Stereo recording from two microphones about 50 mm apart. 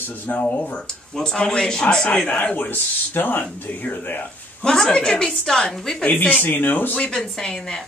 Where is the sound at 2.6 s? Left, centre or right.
Left.